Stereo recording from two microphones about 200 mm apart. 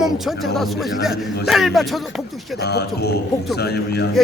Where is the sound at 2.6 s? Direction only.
55° left (ahead or behind).